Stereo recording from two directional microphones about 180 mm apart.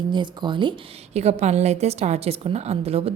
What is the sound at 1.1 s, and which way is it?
A woman's voice, 40° right (ahead or behind).